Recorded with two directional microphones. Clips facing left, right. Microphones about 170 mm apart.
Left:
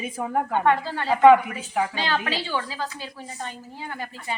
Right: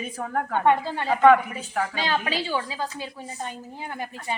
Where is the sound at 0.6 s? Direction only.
15° right (ahead or behind).